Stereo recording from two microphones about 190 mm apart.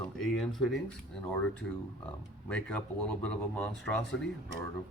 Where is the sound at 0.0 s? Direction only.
Centre (ahead or behind).